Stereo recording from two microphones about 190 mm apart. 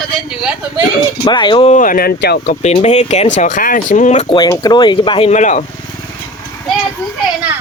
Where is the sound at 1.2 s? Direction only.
25° left (ahead or behind); by 2.4 s 55° left (ahead or behind).